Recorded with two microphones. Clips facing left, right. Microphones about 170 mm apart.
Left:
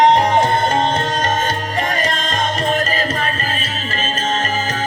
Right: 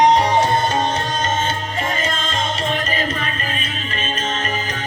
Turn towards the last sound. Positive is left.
turn(degrees=40)  # may be behind; listen again after turning